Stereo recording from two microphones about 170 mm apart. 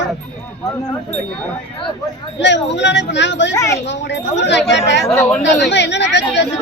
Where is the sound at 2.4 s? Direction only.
90° left.